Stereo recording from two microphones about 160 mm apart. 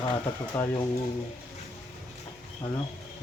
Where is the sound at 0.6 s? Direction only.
10° left (ahead or behind).